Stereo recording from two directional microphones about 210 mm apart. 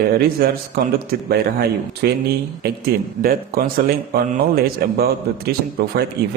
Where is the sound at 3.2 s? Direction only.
45° right (ahead or behind).